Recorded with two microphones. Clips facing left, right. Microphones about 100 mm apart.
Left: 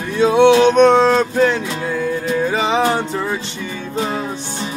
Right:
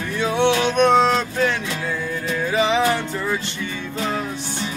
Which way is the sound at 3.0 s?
20° left (ahead or behind).